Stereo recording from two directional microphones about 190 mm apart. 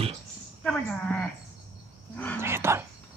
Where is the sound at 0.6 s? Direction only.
5° left (ahead or behind).